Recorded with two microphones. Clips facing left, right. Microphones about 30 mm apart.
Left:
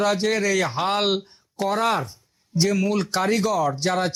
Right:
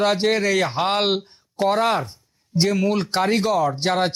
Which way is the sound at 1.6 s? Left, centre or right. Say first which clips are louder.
Right 3 dB; right.